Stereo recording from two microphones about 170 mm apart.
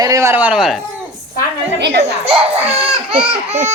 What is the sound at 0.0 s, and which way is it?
Speech, 20° right (ahead or behind).